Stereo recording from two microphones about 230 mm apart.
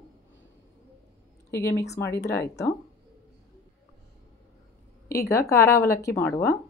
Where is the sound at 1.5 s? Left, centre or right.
Centre.